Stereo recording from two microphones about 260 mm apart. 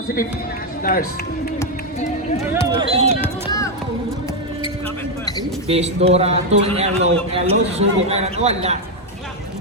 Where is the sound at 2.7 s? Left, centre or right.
Right.